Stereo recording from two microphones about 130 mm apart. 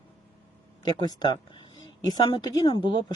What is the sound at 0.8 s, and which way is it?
Speech, 30° left (ahead or behind).